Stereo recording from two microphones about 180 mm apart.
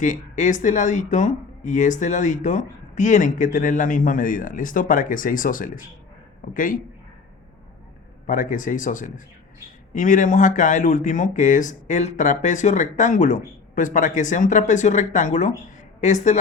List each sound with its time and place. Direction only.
0.0 s speech: 45° left (ahead or behind)
8.3 s a woman's voice: 50° left (ahead or behind)